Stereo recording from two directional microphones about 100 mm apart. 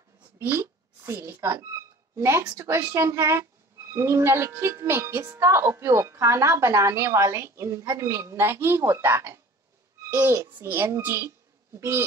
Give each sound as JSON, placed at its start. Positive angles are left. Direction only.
{"t": 0.4, "sound": "a woman's voice", "side_deg": -25}